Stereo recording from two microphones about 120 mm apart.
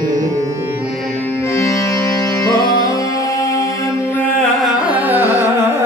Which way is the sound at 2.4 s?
35° left (ahead or behind).